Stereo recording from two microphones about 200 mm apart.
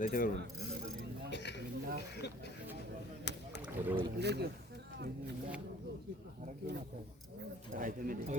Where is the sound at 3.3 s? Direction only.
60° left (ahead or behind).